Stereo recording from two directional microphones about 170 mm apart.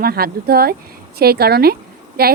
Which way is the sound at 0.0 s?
65° right (ahead or behind).